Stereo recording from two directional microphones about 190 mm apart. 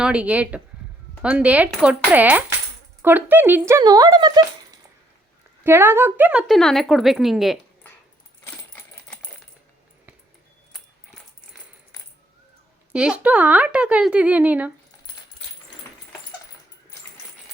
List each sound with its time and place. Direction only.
0.0 s speech: 5° right (ahead or behind)
8.4 s a sound: 10° left (ahead or behind)
12.9 s speech: 5° right (ahead or behind)